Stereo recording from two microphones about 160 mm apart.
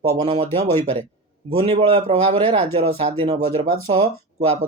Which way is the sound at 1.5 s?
35° right (ahead or behind).